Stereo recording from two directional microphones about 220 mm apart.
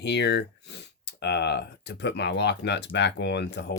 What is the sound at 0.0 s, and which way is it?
Speech, 50° left (ahead or behind).